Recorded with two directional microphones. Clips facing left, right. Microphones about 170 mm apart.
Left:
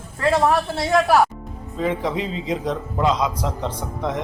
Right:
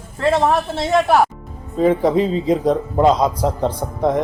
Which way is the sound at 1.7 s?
40° right (ahead or behind).